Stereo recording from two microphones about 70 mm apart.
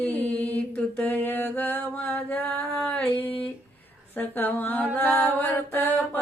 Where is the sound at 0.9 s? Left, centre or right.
Left.